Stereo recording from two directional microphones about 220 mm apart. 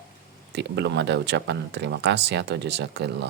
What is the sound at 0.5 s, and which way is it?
Speech, 50° right (ahead or behind).